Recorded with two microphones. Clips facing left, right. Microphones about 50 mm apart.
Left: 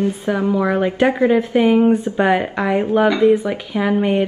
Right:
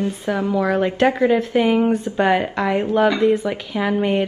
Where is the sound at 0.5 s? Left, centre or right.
Centre.